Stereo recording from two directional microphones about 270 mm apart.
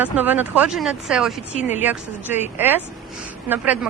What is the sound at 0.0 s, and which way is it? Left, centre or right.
Speech, centre.